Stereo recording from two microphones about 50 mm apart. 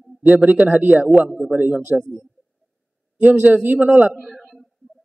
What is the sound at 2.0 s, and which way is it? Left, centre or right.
Speech, centre.